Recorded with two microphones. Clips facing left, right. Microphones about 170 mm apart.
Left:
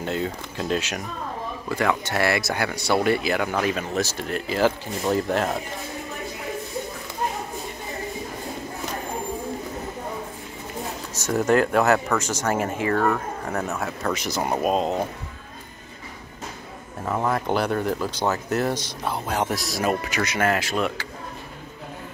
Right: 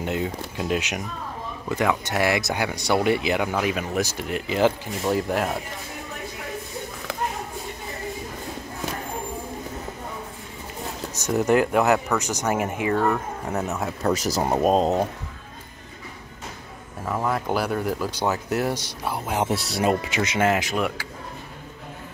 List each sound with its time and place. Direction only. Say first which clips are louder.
0.0 s speech: even; 15° right (ahead or behind)
11.2 s speech: even; 15° right (ahead or behind)
14.1 s speech: right 3 dB; 40° right (ahead or behind)
17.0 s speech: left 1 dB; centre (ahead or behind)